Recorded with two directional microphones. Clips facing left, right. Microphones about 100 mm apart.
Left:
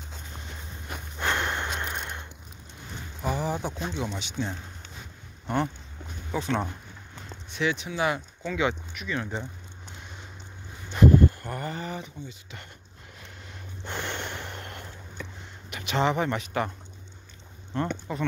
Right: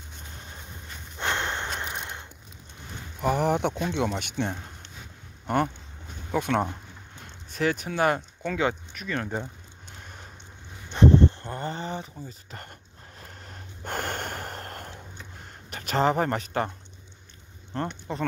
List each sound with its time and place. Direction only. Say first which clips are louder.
1.2 s walk: left 1 dB; 25° right (ahead or behind)
1.8 s a sound: left 1 dB; 15° right (ahead or behind)
3.2 s speech: right 5 dB; 60° right (ahead or behind)
6.3 s speech: right 3 dB; 60° right (ahead or behind)
7.5 s speech: right 2 dB; 45° right (ahead or behind)
10.9 s speech: even; 30° right (ahead or behind)
13.2 s snort: right 1 dB; 45° right (ahead or behind)
15.4 s speech: even; 40° right (ahead or behind)
17.7 s speech: left 2 dB; 35° right (ahead or behind)